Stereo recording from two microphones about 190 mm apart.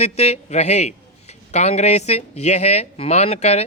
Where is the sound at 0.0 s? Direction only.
35° left (ahead or behind).